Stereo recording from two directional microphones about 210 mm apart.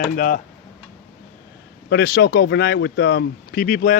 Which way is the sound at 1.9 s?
50° left (ahead or behind).